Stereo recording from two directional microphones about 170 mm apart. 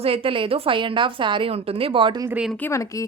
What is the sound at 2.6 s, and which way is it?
Speech, 15° left (ahead or behind).